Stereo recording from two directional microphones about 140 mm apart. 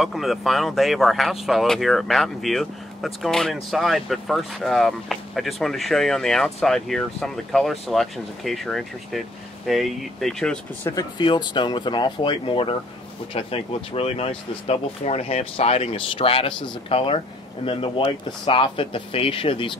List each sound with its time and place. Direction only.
0.0 s speech: centre (ahead or behind)
10.8 s speech: 20° left (ahead or behind)
11.1 s speech: 35° left (ahead or behind)